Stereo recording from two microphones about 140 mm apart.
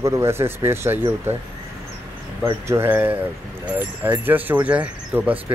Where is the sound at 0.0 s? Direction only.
20° right (ahead or behind).